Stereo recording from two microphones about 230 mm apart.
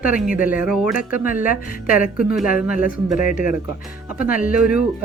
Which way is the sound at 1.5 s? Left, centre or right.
Left.